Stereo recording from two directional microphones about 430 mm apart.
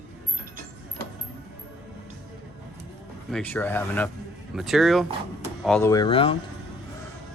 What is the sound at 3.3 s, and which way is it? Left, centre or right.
Speech, centre.